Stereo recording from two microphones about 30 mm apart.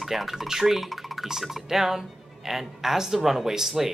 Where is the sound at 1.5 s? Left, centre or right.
Centre.